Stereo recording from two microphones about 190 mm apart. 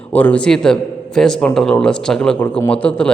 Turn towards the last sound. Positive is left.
turn(degrees=5)  # may be behind; listen again after turning